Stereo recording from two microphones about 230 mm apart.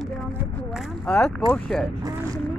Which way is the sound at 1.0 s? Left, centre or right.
Centre.